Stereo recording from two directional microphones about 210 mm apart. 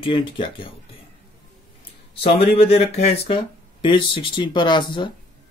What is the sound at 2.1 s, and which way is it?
Speech, 25° left (ahead or behind).